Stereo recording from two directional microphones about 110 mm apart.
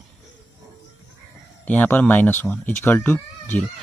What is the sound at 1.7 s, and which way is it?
Speech, 15° left (ahead or behind).